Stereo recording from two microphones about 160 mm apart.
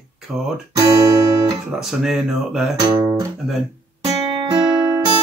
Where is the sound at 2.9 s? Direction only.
25° right (ahead or behind).